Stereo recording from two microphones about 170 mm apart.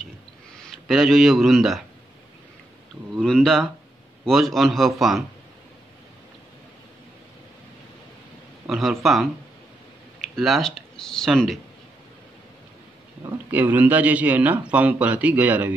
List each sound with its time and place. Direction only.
0.6 s speech: centre (ahead or behind)
3.2 s a man's voice: 5° left (ahead or behind)
8.6 s a man's voice: centre (ahead or behind)
13.5 s a man's voice: 10° right (ahead or behind)